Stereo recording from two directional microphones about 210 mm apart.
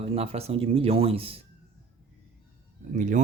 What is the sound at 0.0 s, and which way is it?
Speech, 30° right (ahead or behind).